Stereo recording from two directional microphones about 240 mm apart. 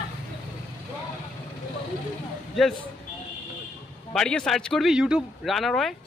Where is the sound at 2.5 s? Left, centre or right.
Centre.